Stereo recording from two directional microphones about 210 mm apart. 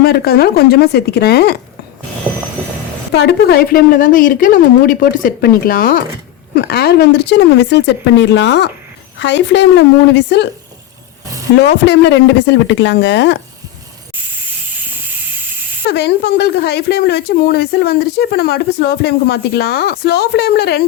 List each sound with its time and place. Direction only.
0.0 s speech: 50° left (ahead or behind)
3.1 s speech: 50° left (ahead or behind)
11.6 s speech: 55° left (ahead or behind)
15.9 s speech: 50° left (ahead or behind)